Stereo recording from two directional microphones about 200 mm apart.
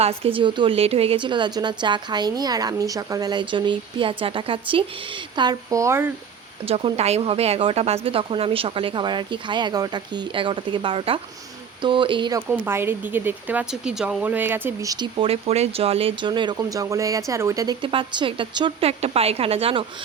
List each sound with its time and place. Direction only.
0.0 s a woman's voice: 30° right (ahead or behind); by 6.1 s 15° right (ahead or behind)
6.7 s a woman's voice: 30° right (ahead or behind)
12.5 s speech: 10° right (ahead or behind); by 19.8 s 30° right (ahead or behind)